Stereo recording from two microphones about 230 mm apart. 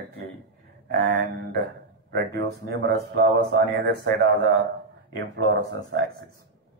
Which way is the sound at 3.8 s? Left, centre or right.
Right.